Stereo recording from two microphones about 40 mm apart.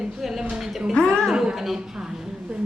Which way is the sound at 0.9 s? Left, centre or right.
Centre.